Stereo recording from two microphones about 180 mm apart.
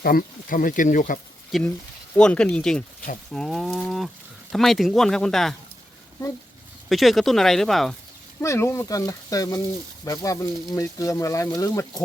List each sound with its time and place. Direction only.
0.0 s speech: 55° left (ahead or behind)
1.5 s speech: centre (ahead or behind)
6.8 s speech: centre (ahead or behind)
8.4 s speech: 15° left (ahead or behind)